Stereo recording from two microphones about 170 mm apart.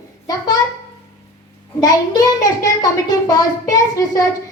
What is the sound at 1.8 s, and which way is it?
A child's voice, 20° left (ahead or behind).